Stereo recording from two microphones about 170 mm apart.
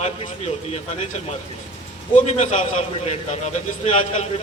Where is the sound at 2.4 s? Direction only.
45° left (ahead or behind).